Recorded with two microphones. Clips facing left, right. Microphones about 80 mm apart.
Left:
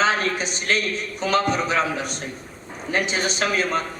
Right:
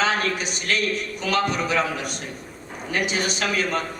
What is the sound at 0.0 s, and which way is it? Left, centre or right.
A man's voice, left.